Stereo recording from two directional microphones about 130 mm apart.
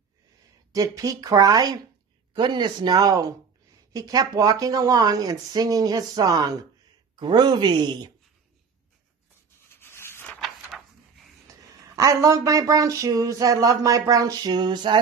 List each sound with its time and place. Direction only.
0.7 s speech: 25° right (ahead or behind)
9.7 s rub: 15° left (ahead or behind)
10.4 s a sound: centre (ahead or behind)
11.4 s speech: 25° right (ahead or behind)